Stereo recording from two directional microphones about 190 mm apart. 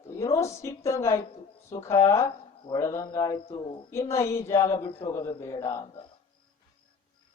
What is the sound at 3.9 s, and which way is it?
Speech, 15° left (ahead or behind).